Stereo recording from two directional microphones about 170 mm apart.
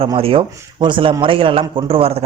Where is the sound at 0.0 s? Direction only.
35° right (ahead or behind).